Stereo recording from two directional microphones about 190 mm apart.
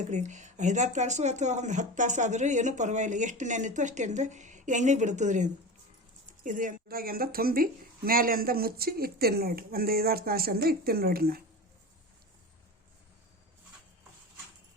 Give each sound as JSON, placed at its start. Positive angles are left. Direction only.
{"t": 0.1, "sound": "a woman's voice", "side_deg": -40}